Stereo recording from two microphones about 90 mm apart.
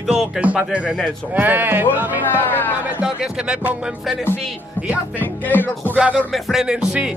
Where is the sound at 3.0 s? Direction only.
10° right (ahead or behind).